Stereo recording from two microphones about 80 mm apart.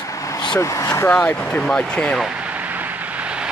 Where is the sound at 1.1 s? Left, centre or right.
Left.